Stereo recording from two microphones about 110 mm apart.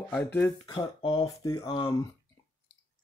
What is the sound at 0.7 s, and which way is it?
Speech, 50° left (ahead or behind).